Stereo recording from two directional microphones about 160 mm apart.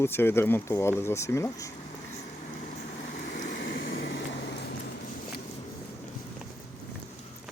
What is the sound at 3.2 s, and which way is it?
Vehicle, 90° left.